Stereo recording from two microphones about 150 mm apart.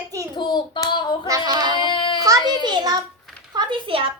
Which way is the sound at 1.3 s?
30° right (ahead or behind).